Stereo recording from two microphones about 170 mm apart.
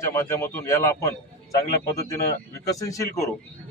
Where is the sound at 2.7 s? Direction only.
20° left (ahead or behind).